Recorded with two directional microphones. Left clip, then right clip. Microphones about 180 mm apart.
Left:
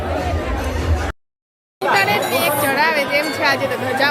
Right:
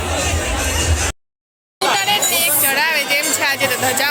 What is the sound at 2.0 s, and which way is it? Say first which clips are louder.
Music: left 3 dB; 5° left (ahead or behind).